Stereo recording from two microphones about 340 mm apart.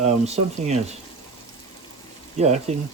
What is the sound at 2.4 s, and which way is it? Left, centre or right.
Speech, centre.